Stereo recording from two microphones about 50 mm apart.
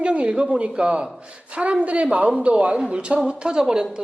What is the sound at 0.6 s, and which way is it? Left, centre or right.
Speech, centre.